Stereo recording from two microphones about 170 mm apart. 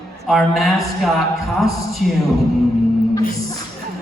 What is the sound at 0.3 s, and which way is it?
A man's voice, centre (ahead or behind).